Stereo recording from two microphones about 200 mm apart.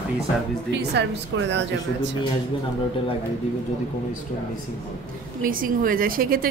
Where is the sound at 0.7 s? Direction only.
60° right (ahead or behind).